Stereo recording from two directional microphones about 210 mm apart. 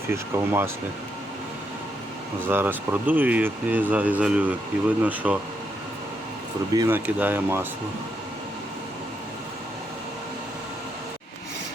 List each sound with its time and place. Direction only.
0.1 s speech: 10° right (ahead or behind)
2.5 s speech: 10° right (ahead or behind)
6.7 s speech: 10° right (ahead or behind)